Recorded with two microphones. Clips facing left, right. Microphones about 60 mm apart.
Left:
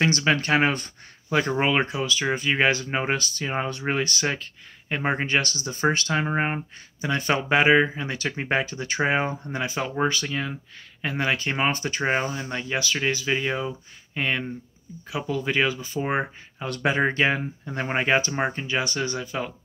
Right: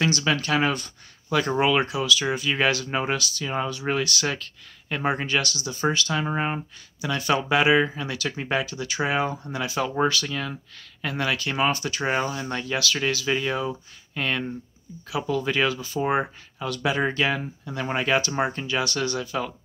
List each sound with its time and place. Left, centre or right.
0.0 s speech: left
16.7 s speech: left
17.0 s speech: left